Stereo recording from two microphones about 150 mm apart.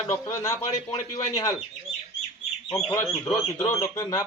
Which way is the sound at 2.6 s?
15° left (ahead or behind).